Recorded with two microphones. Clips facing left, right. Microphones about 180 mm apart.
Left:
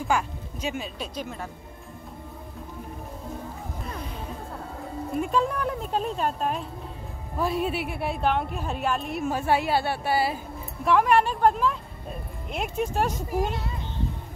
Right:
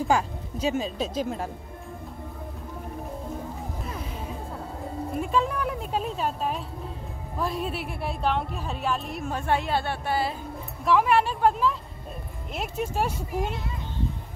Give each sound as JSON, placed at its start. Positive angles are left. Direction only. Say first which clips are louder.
{"t": 0.1, "sound": "speech", "louder": "left 1 dB", "side_deg": -35}
{"t": 3.8, "sound": "music", "louder": "left 2 dB", "side_deg": -5}
{"t": 5.1, "sound": "a woman's voice", "louder": "left 1 dB", "side_deg": 0}